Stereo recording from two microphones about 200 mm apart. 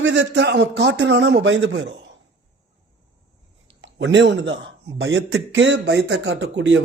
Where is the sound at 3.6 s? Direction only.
65° right (ahead or behind).